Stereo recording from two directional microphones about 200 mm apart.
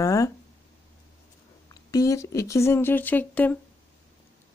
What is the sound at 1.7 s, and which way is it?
Speech, 15° left (ahead or behind).